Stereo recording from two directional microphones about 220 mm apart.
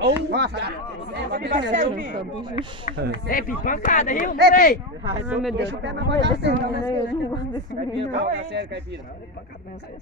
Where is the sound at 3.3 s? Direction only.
40° left (ahead or behind).